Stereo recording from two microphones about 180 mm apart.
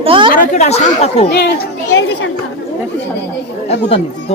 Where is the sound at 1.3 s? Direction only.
70° left (ahead or behind).